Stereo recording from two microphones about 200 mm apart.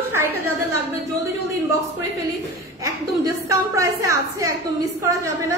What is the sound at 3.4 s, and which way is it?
A woman's voice, 15° right (ahead or behind).